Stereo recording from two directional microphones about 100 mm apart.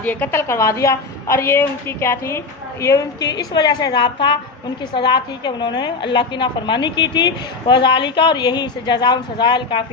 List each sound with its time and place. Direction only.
0.0 s a woman's voice: 15° left (ahead or behind); by 9.8 s 50° left (ahead or behind)